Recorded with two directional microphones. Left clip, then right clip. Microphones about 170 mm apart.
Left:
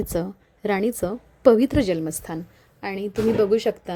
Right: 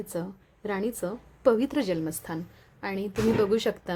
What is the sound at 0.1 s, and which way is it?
A woman's voice, 30° left (ahead or behind).